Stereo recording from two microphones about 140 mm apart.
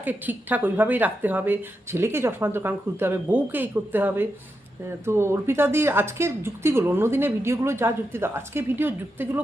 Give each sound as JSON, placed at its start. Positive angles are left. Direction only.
{"t": 0.0, "sound": "a woman's voice", "side_deg": -15}